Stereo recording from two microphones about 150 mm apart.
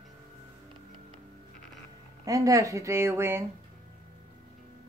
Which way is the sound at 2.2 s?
25° right (ahead or behind).